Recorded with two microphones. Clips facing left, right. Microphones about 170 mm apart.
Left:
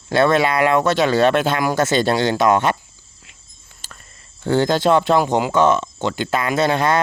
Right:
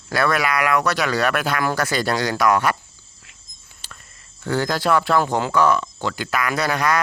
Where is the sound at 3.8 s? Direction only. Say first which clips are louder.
Left 1 dB; 45° left (ahead or behind).